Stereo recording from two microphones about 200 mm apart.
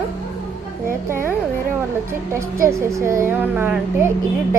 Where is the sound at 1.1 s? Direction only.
10° right (ahead or behind).